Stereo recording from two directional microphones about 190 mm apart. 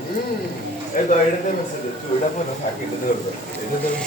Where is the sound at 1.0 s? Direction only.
50° left (ahead or behind).